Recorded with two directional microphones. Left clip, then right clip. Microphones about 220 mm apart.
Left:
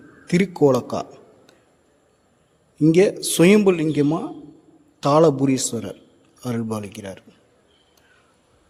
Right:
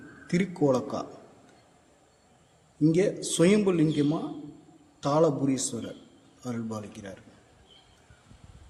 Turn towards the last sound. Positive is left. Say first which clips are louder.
# left 9 dB
turn(degrees=40)  # may be behind; listen again after turning